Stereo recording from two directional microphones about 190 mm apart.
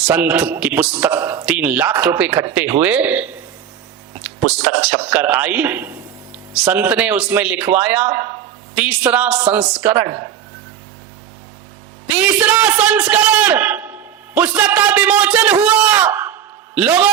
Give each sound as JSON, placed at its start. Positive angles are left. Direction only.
{"t": 0.0, "sound": "a man's voice", "side_deg": -10}
{"t": 5.0, "sound": "a man's voice", "side_deg": -10}
{"t": 8.7, "sound": "a man's voice", "side_deg": -5}
{"t": 9.6, "sound": "speech", "side_deg": -20}
{"t": 12.1, "sound": "a man's voice", "side_deg": -10}